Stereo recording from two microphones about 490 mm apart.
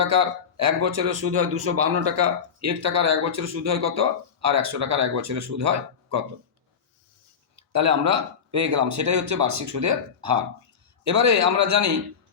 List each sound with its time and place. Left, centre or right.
0.0 s speech: right
7.5 s speech: right